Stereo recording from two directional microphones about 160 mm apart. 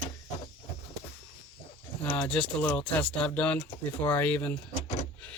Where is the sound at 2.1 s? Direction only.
10° left (ahead or behind).